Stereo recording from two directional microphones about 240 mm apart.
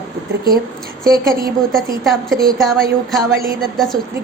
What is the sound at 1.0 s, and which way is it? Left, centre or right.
Speech, right.